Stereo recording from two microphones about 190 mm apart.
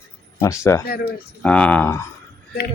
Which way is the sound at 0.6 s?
15° left (ahead or behind).